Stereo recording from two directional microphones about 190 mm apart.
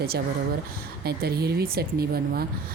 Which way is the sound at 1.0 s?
55° right (ahead or behind).